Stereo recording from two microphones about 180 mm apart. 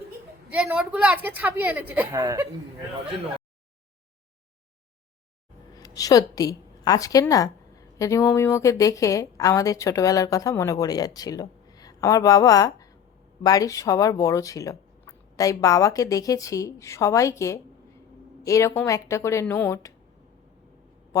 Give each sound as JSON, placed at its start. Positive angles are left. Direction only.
{"t": 0.5, "sound": "speech", "side_deg": -5}
{"t": 5.7, "sound": "a woman's voice", "side_deg": 20}